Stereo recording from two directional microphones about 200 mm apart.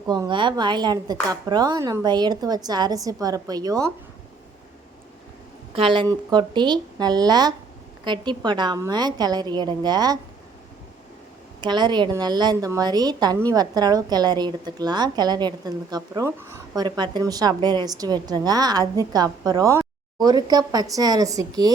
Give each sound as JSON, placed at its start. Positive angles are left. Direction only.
{"t": 0.1, "sound": "a woman's voice", "side_deg": -20}
{"t": 5.7, "sound": "a woman's voice", "side_deg": -25}
{"t": 11.6, "sound": "a woman's voice", "side_deg": -20}